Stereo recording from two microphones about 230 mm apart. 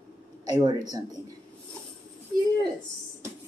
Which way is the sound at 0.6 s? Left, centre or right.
Centre.